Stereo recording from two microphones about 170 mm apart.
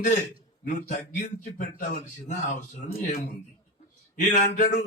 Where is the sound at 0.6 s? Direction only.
50° left (ahead or behind).